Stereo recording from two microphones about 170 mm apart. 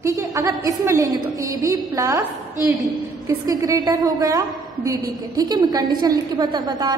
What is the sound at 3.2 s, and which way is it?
A woman's voice, 20° right (ahead or behind).